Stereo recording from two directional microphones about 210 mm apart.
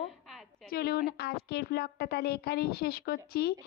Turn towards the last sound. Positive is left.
turn(degrees=45)  # may be behind; listen again after turning